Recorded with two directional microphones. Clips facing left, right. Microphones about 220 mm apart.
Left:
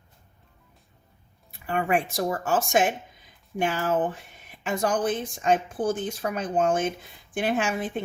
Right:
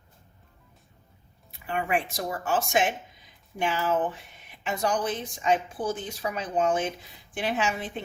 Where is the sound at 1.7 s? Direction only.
45° left (ahead or behind).